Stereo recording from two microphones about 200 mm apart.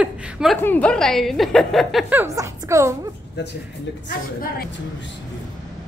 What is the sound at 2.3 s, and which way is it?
Speech, 15° right (ahead or behind).